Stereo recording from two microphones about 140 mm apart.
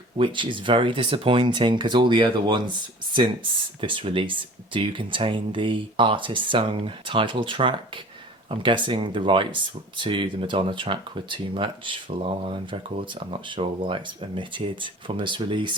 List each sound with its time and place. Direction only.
0.2 s speech: 35° right (ahead or behind)
3.8 s speech: 40° right (ahead or behind)